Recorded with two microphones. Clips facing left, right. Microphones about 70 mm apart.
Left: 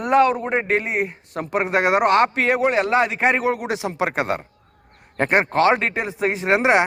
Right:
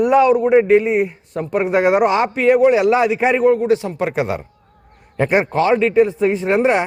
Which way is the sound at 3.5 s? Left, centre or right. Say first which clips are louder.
Right 8 dB; left.